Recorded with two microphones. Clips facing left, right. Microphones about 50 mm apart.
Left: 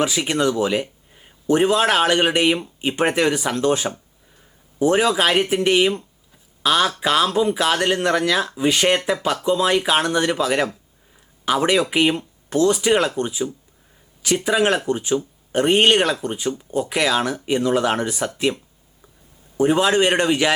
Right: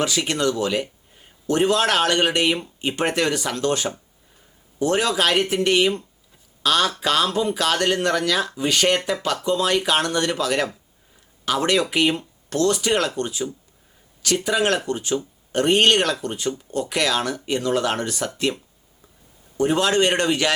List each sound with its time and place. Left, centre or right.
0.0 s speech: centre